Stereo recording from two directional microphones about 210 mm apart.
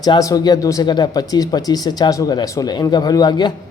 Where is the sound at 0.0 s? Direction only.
15° left (ahead or behind).